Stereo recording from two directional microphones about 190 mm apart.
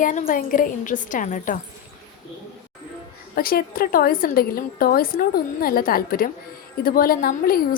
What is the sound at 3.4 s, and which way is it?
A woman's voice, 50° left (ahead or behind).